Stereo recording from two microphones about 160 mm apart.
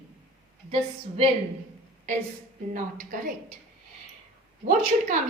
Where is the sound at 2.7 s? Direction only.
55° right (ahead or behind).